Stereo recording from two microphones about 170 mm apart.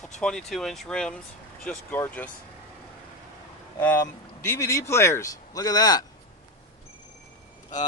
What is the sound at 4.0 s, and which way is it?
A man's voice, 15° left (ahead or behind).